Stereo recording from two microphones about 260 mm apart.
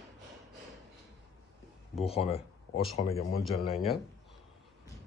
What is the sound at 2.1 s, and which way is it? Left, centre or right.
Speech, left.